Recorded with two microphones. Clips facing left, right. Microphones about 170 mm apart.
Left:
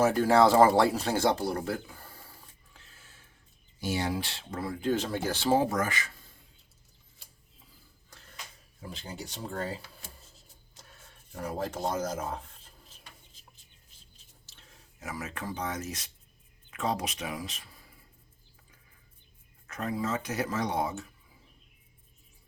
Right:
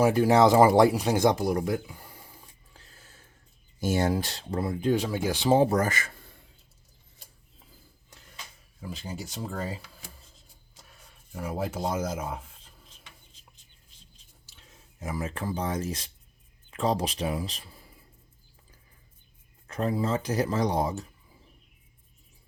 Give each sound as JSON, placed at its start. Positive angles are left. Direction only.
{"t": 0.0, "sound": "speech", "side_deg": -15}
{"t": 2.7, "sound": "a sound", "side_deg": -35}
{"t": 3.8, "sound": "speech", "side_deg": -45}
{"t": 4.6, "sound": "speech", "side_deg": -20}
{"t": 5.6, "sound": "speech", "side_deg": -35}
{"t": 9.0, "sound": "speech", "side_deg": -10}
{"t": 11.3, "sound": "speech", "side_deg": -5}
{"t": 14.7, "sound": "speech", "side_deg": -25}
{"t": 19.6, "sound": "speech", "side_deg": -30}